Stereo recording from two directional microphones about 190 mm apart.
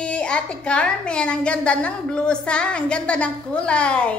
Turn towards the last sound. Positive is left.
turn(degrees=5)  # may be behind; listen again after turning